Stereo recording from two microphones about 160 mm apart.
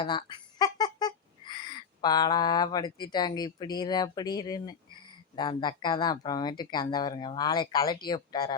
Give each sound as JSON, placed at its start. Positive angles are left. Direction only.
{"t": 0.0, "sound": "speech", "side_deg": 30}